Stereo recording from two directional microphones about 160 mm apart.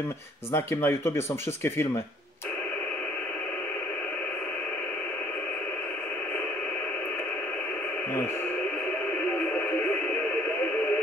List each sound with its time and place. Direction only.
0.5 s speech: 15° left (ahead or behind)